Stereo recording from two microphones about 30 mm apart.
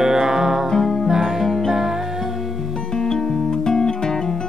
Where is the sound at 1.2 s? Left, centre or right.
Centre.